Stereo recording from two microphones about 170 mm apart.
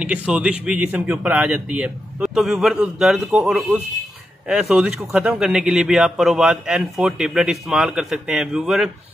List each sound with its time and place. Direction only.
0.0 s a man's voice: 10° right (ahead or behind)